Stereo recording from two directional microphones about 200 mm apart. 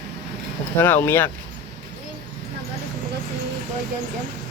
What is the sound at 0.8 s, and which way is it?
Speech, 10° left (ahead or behind).